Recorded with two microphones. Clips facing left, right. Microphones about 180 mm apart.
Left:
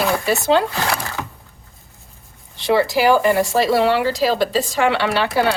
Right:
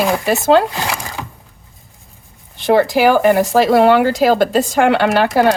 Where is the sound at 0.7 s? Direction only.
15° right (ahead or behind).